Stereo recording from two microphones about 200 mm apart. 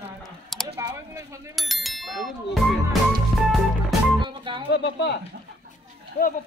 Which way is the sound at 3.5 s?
Centre (ahead or behind).